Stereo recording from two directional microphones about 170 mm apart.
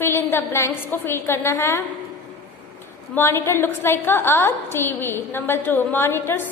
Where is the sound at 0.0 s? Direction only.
15° left (ahead or behind).